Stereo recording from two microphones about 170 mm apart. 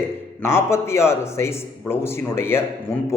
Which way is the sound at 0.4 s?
15° left (ahead or behind).